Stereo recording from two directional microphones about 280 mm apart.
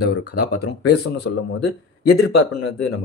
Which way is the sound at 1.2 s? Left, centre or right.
Left.